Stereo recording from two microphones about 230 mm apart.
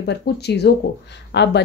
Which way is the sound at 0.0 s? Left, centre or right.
Left.